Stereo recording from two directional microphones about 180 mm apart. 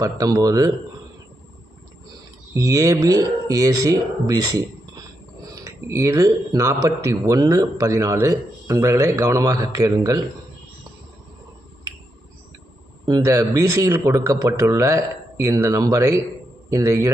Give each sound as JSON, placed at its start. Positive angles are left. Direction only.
{"t": 0.0, "sound": "speech", "side_deg": -20}
{"t": 2.5, "sound": "speech", "side_deg": -20}
{"t": 13.1, "sound": "speech", "side_deg": -20}